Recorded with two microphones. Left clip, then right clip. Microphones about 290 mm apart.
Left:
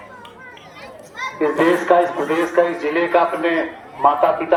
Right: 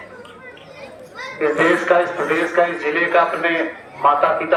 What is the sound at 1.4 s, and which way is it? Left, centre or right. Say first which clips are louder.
A man's voice: right 1 dB; centre.